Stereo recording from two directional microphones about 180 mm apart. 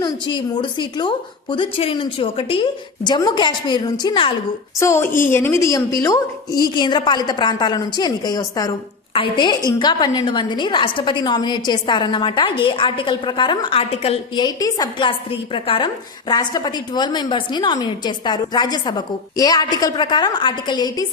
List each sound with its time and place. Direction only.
0.0 s a woman's voice: 25° left (ahead or behind)
4.8 s a woman's voice: 15° left (ahead or behind)